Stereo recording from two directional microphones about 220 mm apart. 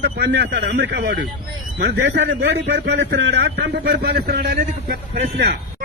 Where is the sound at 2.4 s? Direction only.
50° right (ahead or behind).